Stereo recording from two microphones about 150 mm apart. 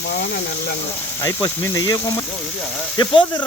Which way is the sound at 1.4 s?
20° left (ahead or behind).